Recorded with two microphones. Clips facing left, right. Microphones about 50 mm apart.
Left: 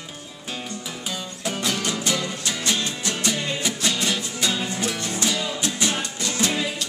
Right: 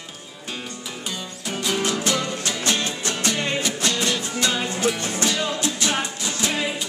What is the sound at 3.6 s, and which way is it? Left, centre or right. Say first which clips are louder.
Music: right 1 dB; centre.